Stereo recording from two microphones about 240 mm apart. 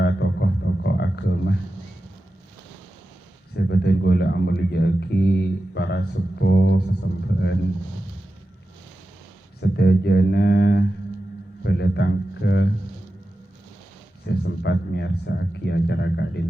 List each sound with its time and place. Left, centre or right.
0.0 s a sound: left
3.5 s speech: left
9.6 s speech: left
14.3 s speech: left